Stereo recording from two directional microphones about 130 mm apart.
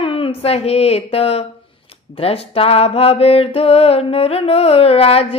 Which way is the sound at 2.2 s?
50° left (ahead or behind).